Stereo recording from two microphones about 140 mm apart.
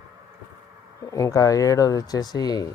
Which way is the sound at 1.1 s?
25° left (ahead or behind).